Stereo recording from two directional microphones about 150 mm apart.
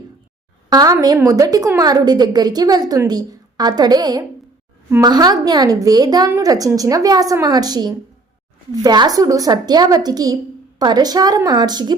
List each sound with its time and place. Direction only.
0.7 s a woman's voice: 25° right (ahead or behind)